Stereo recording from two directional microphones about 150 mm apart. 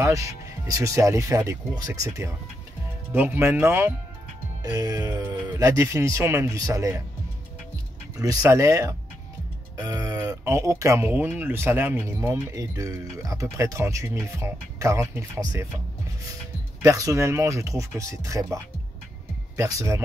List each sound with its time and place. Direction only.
0.0 s speech: 20° right (ahead or behind)
8.2 s speech: 25° right (ahead or behind)
16.8 s speech: 20° right (ahead or behind)